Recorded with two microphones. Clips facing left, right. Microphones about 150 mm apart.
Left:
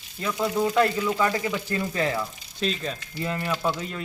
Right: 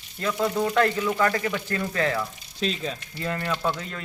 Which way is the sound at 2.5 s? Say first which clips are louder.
Even; centre (ahead or behind).